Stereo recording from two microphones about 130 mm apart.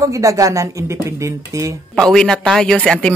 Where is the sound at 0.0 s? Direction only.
25° right (ahead or behind).